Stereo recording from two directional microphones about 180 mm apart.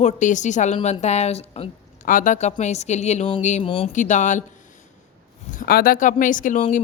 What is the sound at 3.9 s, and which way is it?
Speech, 45° left (ahead or behind).